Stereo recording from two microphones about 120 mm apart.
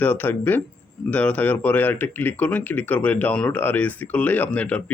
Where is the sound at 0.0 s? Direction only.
15° left (ahead or behind).